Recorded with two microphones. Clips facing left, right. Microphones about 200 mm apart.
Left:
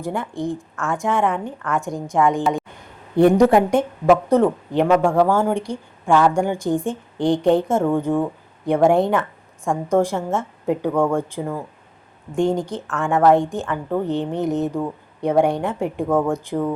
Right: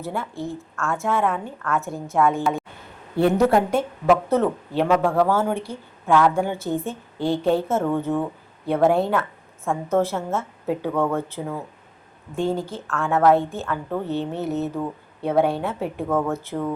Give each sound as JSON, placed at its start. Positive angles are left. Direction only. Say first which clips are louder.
{"t": 0.0, "sound": "a woman's voice", "louder": "left 4 dB", "side_deg": 15}